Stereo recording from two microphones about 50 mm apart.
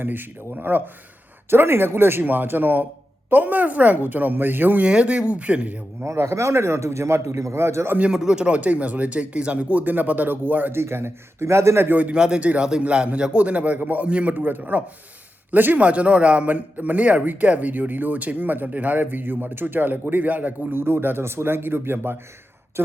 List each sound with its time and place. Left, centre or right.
0.0 s speech: right
2.2 s a man's voice: right
4.8 s speech: right
6.1 s a man's voice: right
8.1 s speech: centre
9.8 s a man's voice: right
10.7 s speech: right
11.9 s speech: right
14.3 s a man's voice: right
15.8 s a man's voice: right